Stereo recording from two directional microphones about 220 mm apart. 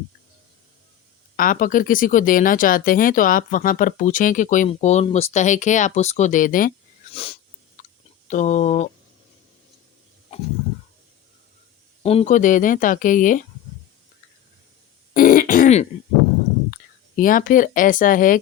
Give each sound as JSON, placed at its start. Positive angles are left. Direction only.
{"t": 1.4, "sound": "speech", "side_deg": 40}
{"t": 7.1, "sound": "wheeze", "side_deg": 25}
{"t": 7.8, "sound": "a sound", "side_deg": 35}
{"t": 8.3, "sound": "speech", "side_deg": 35}
{"t": 10.3, "sound": "a sound", "side_deg": 25}
{"t": 12.0, "sound": "speech", "side_deg": 30}
{"t": 15.1, "sound": "throat clearing", "side_deg": 40}
{"t": 16.7, "sound": "speech", "side_deg": 40}